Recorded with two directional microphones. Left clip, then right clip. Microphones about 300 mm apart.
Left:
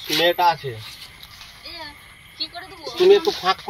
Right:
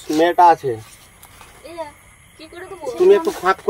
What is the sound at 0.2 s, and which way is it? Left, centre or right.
Speech, centre.